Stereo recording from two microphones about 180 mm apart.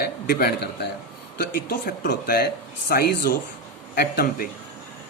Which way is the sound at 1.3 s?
55° left (ahead or behind).